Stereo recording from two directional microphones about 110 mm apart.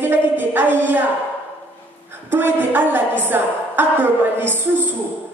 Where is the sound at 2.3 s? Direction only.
15° right (ahead or behind).